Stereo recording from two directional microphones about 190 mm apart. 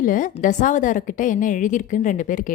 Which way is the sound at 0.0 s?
45° left (ahead or behind).